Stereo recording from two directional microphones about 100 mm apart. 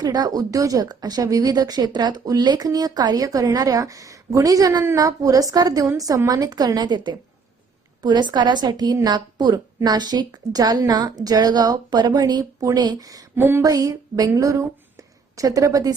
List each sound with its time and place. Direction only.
0.0 s a woman's voice: 40° right (ahead or behind)
13.3 s a sound: 25° right (ahead or behind)
13.6 s a woman's voice: 35° right (ahead or behind)